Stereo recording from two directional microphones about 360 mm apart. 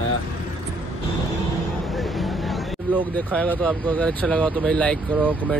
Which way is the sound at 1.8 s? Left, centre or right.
Centre.